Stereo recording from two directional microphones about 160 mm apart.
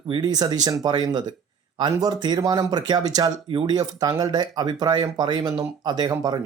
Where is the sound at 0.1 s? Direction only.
25° right (ahead or behind).